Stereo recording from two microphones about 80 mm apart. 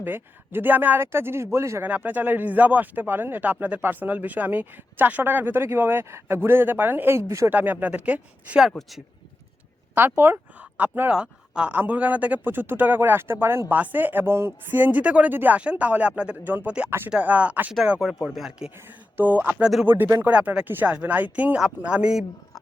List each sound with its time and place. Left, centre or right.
0.0 s speech: right
1.9 s speech: right
7.5 s speech: right
9.9 s speech: right
18.0 s speech: centre
19.1 s speech: right
20.2 s speech: centre